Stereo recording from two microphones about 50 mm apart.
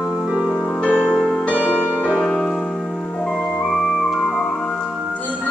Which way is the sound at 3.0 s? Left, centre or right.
Left.